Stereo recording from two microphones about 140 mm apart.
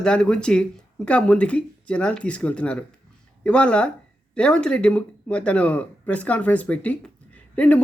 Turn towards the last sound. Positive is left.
turn(degrees=10)  # may be behind; listen again after turning